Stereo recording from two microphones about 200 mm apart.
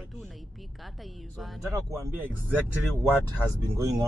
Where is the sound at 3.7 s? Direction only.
15° right (ahead or behind).